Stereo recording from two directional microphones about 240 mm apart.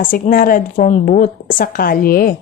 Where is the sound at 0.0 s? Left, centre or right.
Left.